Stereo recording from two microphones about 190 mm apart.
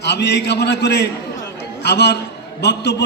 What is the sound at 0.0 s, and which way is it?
A man's voice, 60° left (ahead or behind).